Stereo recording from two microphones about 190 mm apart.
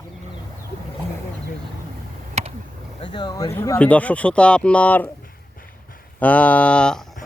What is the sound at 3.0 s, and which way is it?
Speech, 25° left (ahead or behind).